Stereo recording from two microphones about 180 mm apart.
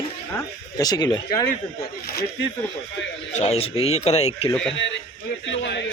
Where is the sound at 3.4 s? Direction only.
35° left (ahead or behind).